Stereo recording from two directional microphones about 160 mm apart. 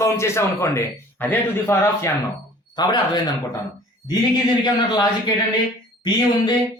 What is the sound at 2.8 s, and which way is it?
Speech, 25° left (ahead or behind).